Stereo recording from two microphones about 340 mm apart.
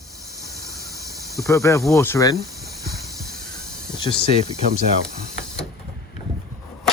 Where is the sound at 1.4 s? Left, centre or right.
Centre.